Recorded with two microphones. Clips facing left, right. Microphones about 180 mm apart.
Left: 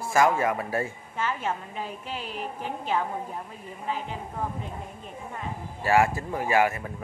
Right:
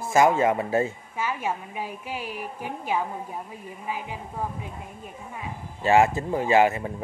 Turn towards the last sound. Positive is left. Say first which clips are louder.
# right 4 dB
turn(degrees=-25)  # may be behind; listen again after turning